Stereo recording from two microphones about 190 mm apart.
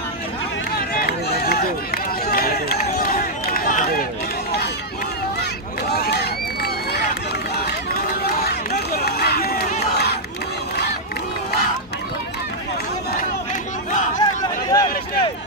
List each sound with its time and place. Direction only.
0.7 s run: 50° left (ahead or behind)
5.9 s run: 55° left (ahead or behind)
14.2 s a sound: 20° left (ahead or behind)